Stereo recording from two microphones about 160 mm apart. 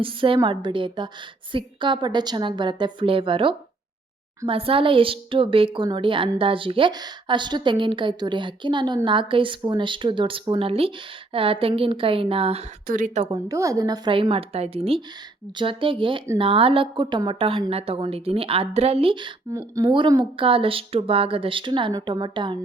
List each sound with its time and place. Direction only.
0.0 s a woman's voice: 35° right (ahead or behind)
12.9 s a woman's voice: 55° right (ahead or behind)
13.5 s a woman's voice: 20° right (ahead or behind)